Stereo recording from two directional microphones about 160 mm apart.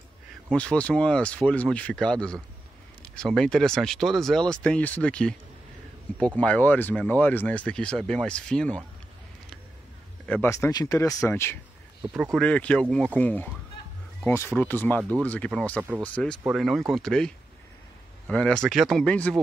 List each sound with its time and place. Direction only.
0.6 s speech: 10° left (ahead or behind)
10.2 s speech: 10° left (ahead or behind)
10.5 s speech: 20° left (ahead or behind)
12.1 s speech: 5° right (ahead or behind)
12.4 s speech: 5° left (ahead or behind)